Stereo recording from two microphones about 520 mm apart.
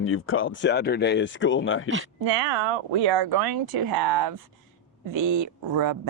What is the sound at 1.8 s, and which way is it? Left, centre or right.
Speech, right.